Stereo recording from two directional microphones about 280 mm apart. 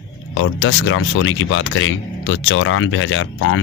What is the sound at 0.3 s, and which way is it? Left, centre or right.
Speech, left.